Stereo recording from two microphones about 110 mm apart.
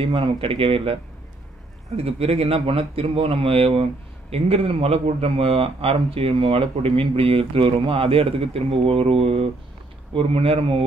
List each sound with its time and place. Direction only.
0.4 s speech: 55° right (ahead or behind)
2.0 s speech: 65° right (ahead or behind)